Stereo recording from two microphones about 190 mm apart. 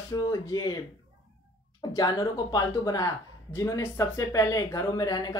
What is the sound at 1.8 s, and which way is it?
Speech, 20° left (ahead or behind).